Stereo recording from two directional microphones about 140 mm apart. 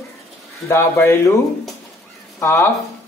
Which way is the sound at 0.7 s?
15° left (ahead or behind).